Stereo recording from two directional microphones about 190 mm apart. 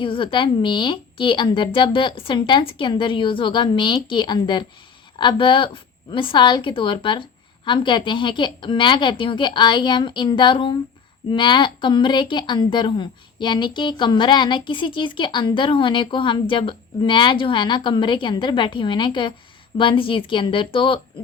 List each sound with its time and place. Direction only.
0.0 s a woman's voice: 25° left (ahead or behind)